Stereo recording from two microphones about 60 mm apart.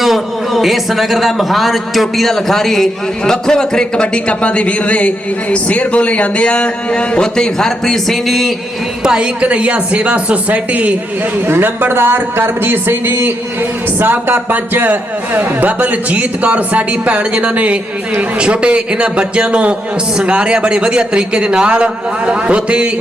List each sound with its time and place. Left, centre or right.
0.0 s a man's voice: centre
9.0 s a woman's voice: centre
11.4 s a woman's voice: right; by 22.9 s centre